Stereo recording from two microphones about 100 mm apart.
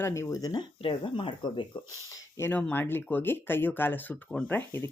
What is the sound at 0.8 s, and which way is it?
Speech, 60° left (ahead or behind).